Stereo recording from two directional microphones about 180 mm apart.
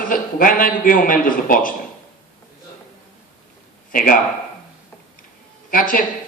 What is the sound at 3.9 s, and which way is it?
Speech, 50° left (ahead or behind).